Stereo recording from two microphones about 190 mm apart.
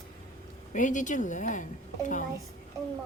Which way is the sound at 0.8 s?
40° left (ahead or behind).